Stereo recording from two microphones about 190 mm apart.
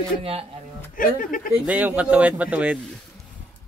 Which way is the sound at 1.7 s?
10° right (ahead or behind).